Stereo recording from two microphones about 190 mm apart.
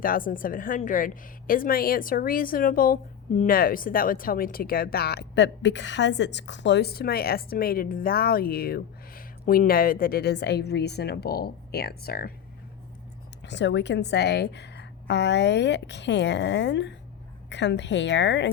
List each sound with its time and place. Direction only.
0.0 s a woman's voice: 50° left (ahead or behind)
13.4 s a woman's voice: 70° left (ahead or behind)